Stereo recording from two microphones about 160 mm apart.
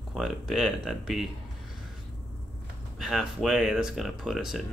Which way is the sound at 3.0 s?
5° right (ahead or behind).